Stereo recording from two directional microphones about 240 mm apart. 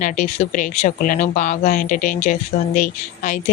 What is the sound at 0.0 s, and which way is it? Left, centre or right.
A woman's voice, left.